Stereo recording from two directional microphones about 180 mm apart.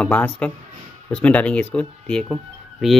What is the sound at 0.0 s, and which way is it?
Speech, 5° left (ahead or behind).